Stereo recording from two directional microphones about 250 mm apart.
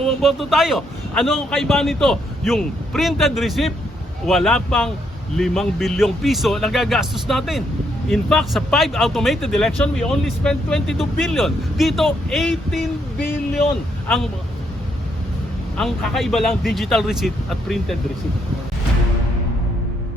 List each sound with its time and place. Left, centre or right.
0.0 s speech: centre
15.8 s speech: centre